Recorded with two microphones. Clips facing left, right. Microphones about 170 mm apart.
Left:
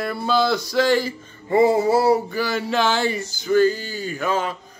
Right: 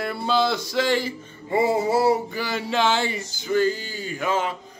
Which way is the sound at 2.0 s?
20° right (ahead or behind).